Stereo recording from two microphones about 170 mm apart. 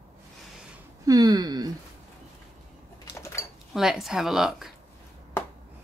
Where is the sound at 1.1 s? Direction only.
25° right (ahead or behind).